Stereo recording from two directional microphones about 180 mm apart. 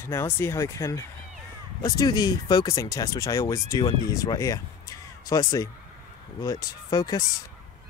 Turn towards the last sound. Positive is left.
turn(degrees=20)  # may be behind; listen again after turning